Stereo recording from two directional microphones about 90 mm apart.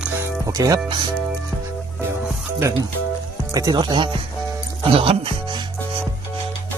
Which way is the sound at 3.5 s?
50° right (ahead or behind).